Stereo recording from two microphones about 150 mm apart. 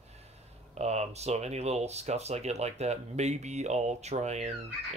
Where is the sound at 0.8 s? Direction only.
45° right (ahead or behind).